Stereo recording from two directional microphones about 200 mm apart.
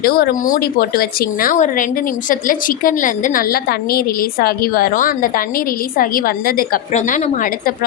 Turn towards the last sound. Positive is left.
turn(degrees=45)  # may be behind; listen again after turning